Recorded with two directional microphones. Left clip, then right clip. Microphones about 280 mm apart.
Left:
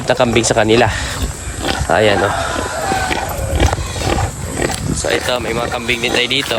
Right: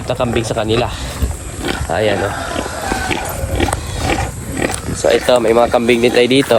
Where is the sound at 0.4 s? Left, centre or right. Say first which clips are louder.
Left 5 dB; left.